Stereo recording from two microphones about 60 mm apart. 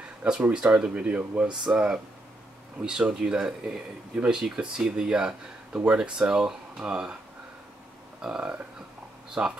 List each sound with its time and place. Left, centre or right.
0.2 s speech: centre
8.2 s speech: centre
9.4 s speech: right